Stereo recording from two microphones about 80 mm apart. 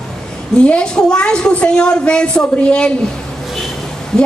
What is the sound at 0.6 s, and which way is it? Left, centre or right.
A woman's voice, centre.